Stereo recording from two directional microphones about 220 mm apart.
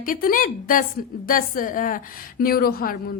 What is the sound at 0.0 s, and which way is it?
A woman's voice, 40° left (ahead or behind).